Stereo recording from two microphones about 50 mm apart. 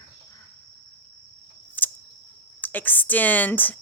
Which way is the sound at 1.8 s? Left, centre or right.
Left.